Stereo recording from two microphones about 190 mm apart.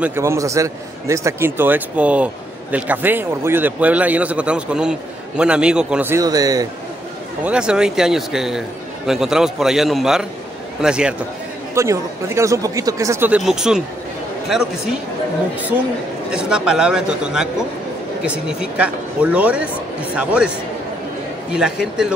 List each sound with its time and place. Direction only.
0.0 s a man's voice: 15° right (ahead or behind)
7.4 s a man's voice: 5° right (ahead or behind)
11.7 s a man's voice: 15° right (ahead or behind)
13.4 s a man's voice: centre (ahead or behind)
16.3 s a man's voice: 5° right (ahead or behind)